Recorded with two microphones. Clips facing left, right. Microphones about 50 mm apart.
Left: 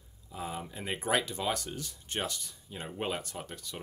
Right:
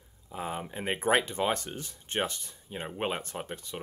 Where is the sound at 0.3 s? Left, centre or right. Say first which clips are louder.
Right 3 dB; right.